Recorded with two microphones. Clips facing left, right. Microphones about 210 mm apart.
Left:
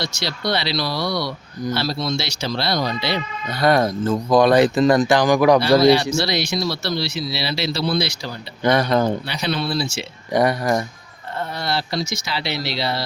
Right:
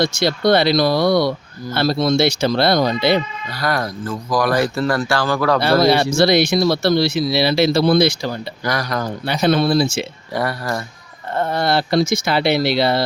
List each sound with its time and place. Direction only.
0.0 s speech: 50° right (ahead or behind)
3.6 s speech: 25° left (ahead or behind)
5.8 s speech: 50° right (ahead or behind)
8.6 s speech: 25° left (ahead or behind)
9.2 s speech: 50° right (ahead or behind)
10.3 s speech: 20° left (ahead or behind)
11.3 s speech: 55° right (ahead or behind)